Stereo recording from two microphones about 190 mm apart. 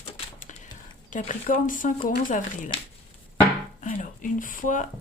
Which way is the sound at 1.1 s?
45° left (ahead or behind).